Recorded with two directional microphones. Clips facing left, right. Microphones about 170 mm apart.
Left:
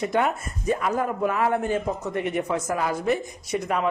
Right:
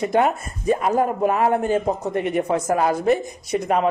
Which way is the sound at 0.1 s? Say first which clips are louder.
Right 4 dB; 30° right (ahead or behind).